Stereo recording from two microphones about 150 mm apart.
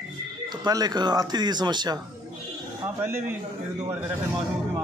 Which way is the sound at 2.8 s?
15° right (ahead or behind).